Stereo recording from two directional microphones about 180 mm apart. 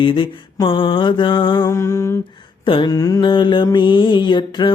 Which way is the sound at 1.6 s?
15° left (ahead or behind).